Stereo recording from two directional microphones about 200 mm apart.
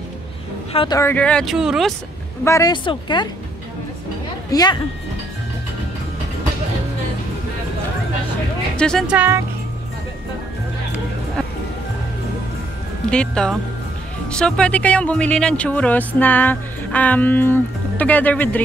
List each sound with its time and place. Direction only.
0.7 s speech: 20° left (ahead or behind); by 2.0 s centre (ahead or behind)
2.4 s speech: 15° left (ahead or behind)
4.5 s speech: 20° left (ahead or behind)
8.7 s speech: 5° left (ahead or behind)
13.1 s speech: 5° left (ahead or behind)